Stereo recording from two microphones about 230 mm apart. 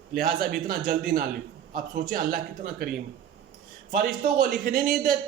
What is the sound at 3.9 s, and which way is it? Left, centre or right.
A man's voice, right.